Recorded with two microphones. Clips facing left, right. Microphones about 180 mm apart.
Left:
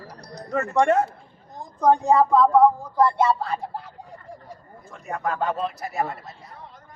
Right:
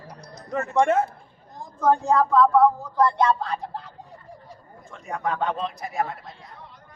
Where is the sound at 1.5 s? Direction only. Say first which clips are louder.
Left 2 dB; 20° left (ahead or behind).